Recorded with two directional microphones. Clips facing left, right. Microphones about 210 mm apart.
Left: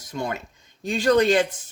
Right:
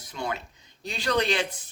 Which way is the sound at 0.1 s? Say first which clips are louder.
Left 4 dB; 45° left (ahead or behind).